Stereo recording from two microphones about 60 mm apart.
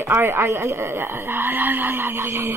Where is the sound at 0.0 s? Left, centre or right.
Right.